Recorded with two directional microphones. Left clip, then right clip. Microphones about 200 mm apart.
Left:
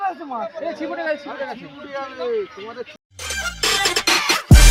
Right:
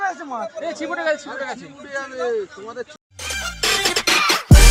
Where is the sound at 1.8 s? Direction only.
25° left (ahead or behind).